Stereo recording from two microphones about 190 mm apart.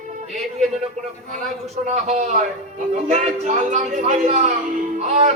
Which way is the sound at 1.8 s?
40° right (ahead or behind).